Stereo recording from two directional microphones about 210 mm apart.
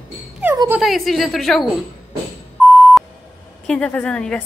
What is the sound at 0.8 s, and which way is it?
Speech, centre (ahead or behind).